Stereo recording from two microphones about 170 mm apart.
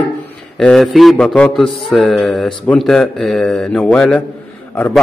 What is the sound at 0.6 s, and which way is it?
A man's voice, 5° left (ahead or behind).